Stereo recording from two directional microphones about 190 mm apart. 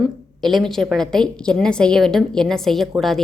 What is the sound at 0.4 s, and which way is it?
A woman's voice, centre (ahead or behind).